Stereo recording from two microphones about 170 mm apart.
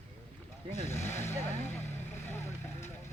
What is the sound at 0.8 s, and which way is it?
Speech, 15° left (ahead or behind).